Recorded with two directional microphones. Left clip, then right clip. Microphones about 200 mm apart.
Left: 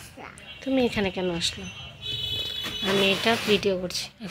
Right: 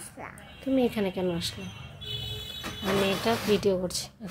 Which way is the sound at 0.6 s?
Centre (ahead or behind).